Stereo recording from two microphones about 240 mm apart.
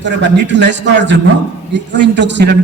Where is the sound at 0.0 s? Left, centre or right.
Right.